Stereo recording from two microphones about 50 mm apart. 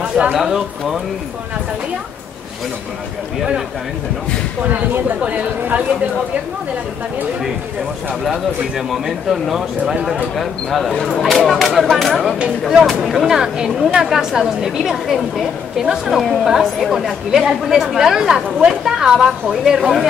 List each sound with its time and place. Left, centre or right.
0.4 s speech: centre
5.2 s speech: right
8.2 s speech: centre